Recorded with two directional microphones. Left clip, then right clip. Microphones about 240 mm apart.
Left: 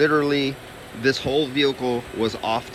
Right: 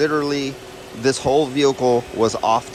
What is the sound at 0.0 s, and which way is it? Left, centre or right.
Speech, centre.